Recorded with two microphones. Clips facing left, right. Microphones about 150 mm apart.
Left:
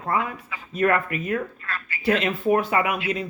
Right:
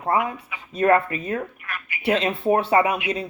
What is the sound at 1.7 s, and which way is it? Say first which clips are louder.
Speech: left 1 dB; 15° right (ahead or behind).